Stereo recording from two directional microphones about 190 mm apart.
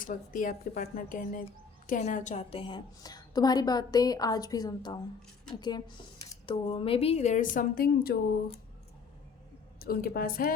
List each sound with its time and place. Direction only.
0.0 s a woman's voice: 45° left (ahead or behind)
9.7 s a woman's voice: 50° left (ahead or behind)